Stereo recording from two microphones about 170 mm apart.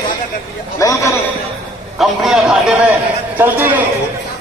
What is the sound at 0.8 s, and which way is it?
Speech, 20° left (ahead or behind).